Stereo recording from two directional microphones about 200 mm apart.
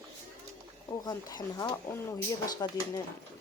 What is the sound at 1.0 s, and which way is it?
Speech, 20° left (ahead or behind).